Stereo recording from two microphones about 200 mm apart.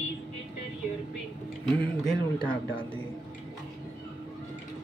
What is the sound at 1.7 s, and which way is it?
Speech, 5° left (ahead or behind).